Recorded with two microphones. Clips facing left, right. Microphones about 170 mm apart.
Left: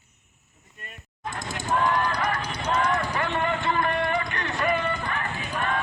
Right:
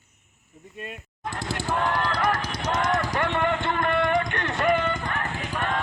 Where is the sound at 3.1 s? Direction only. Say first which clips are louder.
Right 2 dB; 65° right (ahead or behind).